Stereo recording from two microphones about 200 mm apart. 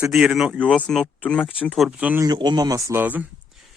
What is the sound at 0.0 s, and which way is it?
Speech, 5° right (ahead or behind).